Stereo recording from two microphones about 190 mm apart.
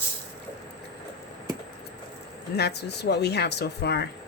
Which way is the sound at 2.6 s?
60° left (ahead or behind).